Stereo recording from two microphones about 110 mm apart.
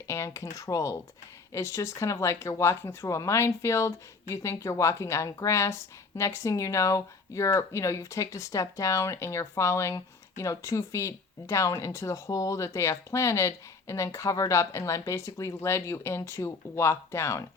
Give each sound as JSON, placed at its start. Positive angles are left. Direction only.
{"t": 0.1, "sound": "speech", "side_deg": 30}